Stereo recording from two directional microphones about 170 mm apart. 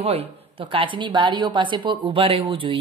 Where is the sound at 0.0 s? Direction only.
35° right (ahead or behind).